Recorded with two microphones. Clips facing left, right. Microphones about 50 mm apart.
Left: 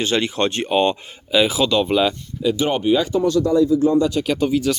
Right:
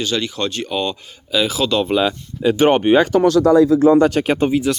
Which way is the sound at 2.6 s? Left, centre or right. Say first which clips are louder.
Right 6 dB; right.